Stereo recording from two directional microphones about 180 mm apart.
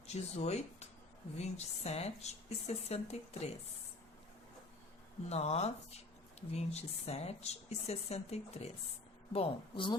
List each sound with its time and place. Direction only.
0.1 s speech: 35° left (ahead or behind)
5.3 s a woman's voice: 35° left (ahead or behind)